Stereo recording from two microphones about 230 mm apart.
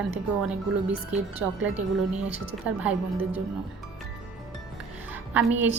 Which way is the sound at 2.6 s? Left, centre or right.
Centre.